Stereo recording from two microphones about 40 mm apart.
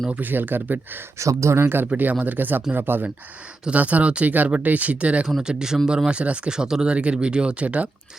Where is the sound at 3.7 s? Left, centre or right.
Right.